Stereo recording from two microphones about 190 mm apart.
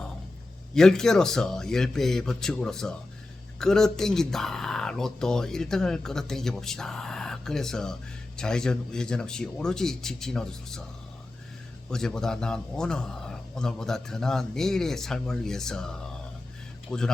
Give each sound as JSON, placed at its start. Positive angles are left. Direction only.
{"t": 0.7, "sound": "speech", "side_deg": 5}
{"t": 11.9, "sound": "speech", "side_deg": 5}